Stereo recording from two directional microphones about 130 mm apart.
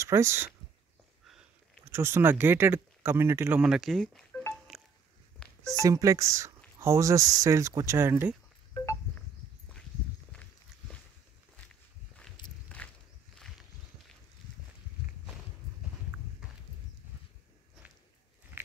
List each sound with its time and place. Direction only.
0.0 s speech: 20° right (ahead or behind)
1.9 s speech: 20° right (ahead or behind); by 4.4 s 5° left (ahead or behind)
4.7 s a sound: centre (ahead or behind)
5.4 s music: 5° left (ahead or behind)
5.8 s speech: 25° right (ahead or behind)
12.6 s walk: 10° left (ahead or behind)